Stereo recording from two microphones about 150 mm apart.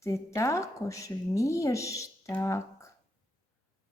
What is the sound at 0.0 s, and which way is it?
Speech, 20° left (ahead or behind).